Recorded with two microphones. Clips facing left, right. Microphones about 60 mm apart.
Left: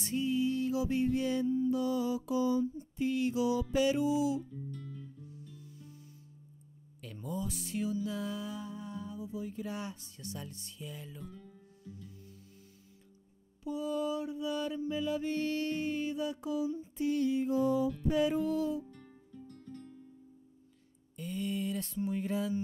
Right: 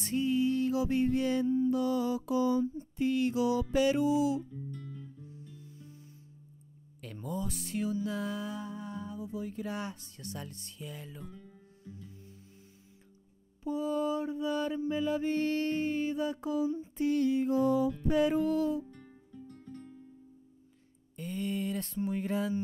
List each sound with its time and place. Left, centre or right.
0.0 s music: right
1.7 s mantra: right
3.7 s music: right
4.4 s music: centre
5.2 s music: right
7.0 s music: right
11.2 s music: centre
11.8 s music: right
13.7 s mantra: right
18.0 s music: right
18.9 s music: centre
21.2 s speech: right